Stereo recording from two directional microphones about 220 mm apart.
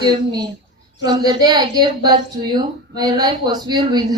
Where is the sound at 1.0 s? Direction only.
20° right (ahead or behind).